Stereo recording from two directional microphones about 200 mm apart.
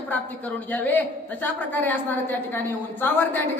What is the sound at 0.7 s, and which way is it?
A woman's voice, 10° left (ahead or behind).